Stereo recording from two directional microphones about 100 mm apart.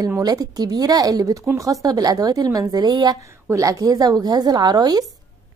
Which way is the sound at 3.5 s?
35° right (ahead or behind).